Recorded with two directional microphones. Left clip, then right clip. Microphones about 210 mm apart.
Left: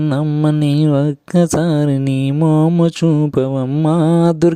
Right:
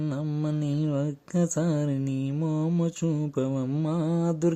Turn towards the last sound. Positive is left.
turn(degrees=45)  # may be behind; listen again after turning